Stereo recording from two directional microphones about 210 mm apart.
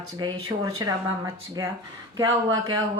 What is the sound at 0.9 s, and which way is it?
Speech, 15° right (ahead or behind).